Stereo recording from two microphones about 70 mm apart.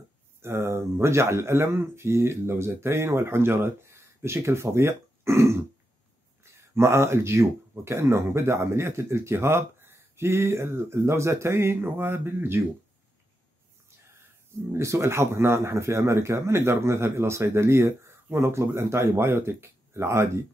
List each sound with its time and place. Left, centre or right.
0.4 s speech: right
14.7 s speech: right